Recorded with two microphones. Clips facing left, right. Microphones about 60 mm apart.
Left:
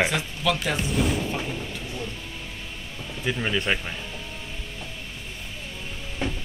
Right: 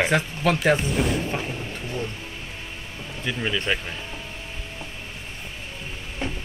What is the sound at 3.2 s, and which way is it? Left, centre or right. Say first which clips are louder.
Speech: even; centre.